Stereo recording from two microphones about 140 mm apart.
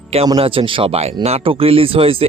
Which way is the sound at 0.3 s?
40° right (ahead or behind).